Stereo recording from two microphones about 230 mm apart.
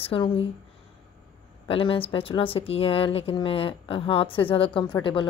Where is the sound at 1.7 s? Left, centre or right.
Left.